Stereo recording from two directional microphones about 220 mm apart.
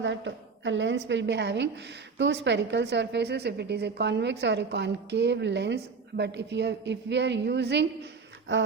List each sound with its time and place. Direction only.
0.0 s a woman's voice: 55° right (ahead or behind)